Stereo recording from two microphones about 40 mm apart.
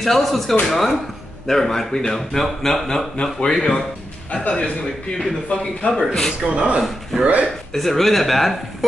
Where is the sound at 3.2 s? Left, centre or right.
Left.